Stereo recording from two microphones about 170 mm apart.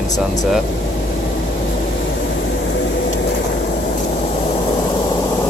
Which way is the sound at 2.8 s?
90° left.